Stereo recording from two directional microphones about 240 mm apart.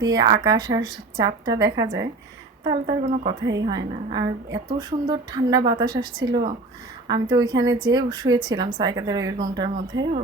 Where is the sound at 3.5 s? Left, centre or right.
Centre.